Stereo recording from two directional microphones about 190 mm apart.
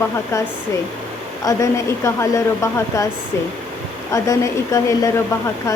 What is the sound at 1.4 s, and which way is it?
A woman's voice, 15° left (ahead or behind).